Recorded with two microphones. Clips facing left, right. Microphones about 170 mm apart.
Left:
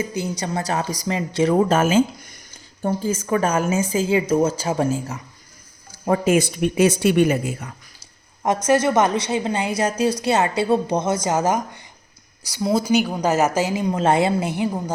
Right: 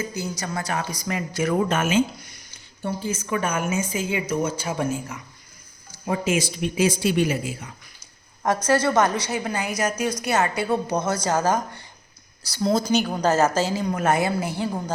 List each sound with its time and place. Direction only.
0.2 s a woman's voice: 25° left (ahead or behind)
6.1 s speech: 55° left (ahead or behind)
8.4 s a woman's voice: 20° left (ahead or behind)